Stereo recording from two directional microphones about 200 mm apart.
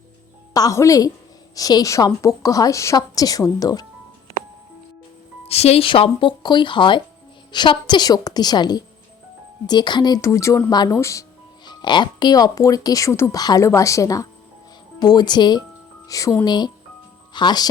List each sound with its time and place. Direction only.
0.5 s speech: 15° left (ahead or behind)
5.5 s speech: 30° left (ahead or behind)